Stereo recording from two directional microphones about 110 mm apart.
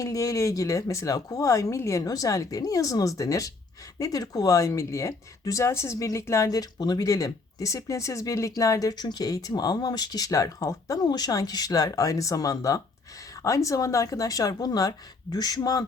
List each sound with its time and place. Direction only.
0.0 s speech: 30° left (ahead or behind)